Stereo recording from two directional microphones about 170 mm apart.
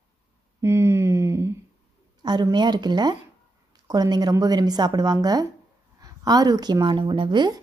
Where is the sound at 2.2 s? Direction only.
25° right (ahead or behind).